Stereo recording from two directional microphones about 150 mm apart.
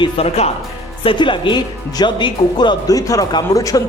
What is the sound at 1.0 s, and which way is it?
Speech, 35° left (ahead or behind).